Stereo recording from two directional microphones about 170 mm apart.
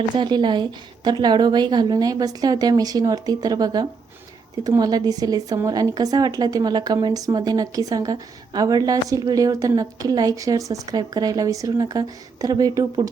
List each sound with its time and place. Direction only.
0.2 s a woman's voice: 25° right (ahead or behind)